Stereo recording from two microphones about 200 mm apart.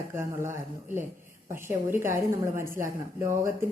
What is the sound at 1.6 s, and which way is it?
Speech, 10° right (ahead or behind).